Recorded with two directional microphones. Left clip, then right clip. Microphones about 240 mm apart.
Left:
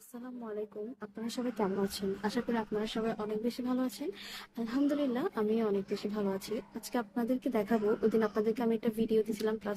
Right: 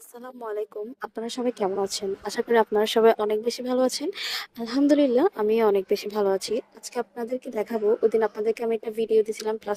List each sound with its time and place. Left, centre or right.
1.0 s speech: right